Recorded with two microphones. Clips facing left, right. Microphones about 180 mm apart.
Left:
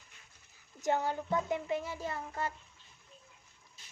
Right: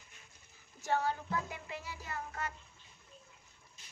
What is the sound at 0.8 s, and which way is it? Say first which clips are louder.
Music: left 2 dB; 15° left (ahead or behind).